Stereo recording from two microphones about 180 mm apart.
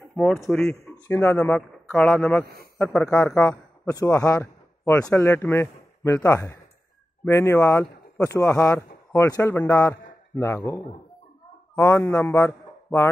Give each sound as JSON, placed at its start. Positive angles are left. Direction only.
{"t": 0.1, "sound": "a man's voice", "side_deg": 0}
{"t": 2.4, "sound": "a man's voice", "side_deg": -55}
{"t": 2.9, "sound": "speech", "side_deg": 5}
{"t": 3.9, "sound": "a man's voice", "side_deg": 20}
{"t": 11.9, "sound": "a man's voice", "side_deg": 15}